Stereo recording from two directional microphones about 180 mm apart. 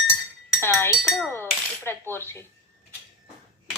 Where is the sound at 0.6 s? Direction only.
15° left (ahead or behind).